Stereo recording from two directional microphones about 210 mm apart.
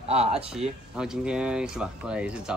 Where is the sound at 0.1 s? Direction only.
30° right (ahead or behind).